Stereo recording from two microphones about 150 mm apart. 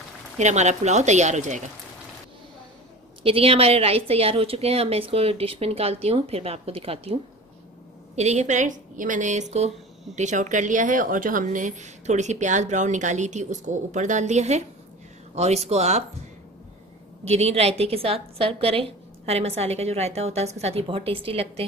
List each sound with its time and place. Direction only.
0.4 s a woman's voice: 50° right (ahead or behind)
3.3 s speech: 40° right (ahead or behind)
8.2 s a woman's voice: 50° right (ahead or behind)
17.2 s a woman's voice: 45° right (ahead or behind)